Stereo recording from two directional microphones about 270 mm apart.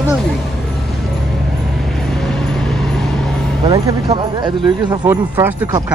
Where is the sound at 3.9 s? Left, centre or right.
Centre.